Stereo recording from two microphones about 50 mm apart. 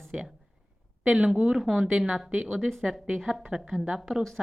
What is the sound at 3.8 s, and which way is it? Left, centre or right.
Speech, right.